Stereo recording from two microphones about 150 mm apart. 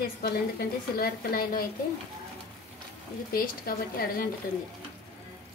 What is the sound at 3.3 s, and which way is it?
Speech, 75° left (ahead or behind).